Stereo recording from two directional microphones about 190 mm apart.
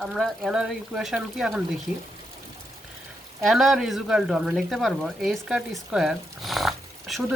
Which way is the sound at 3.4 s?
Centre (ahead or behind).